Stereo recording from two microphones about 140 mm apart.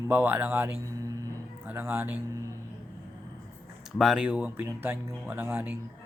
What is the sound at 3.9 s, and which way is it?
Speech, 5° right (ahead or behind).